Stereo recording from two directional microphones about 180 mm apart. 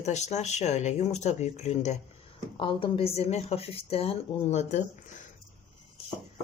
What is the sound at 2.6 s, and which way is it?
A woman's voice, 30° left (ahead or behind).